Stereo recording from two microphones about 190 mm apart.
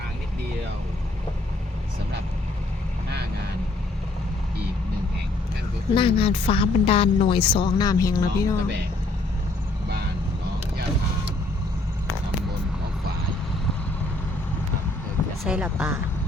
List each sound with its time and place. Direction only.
5.9 s a woman's voice: 25° left (ahead or behind)
15.4 s speech: 5° right (ahead or behind)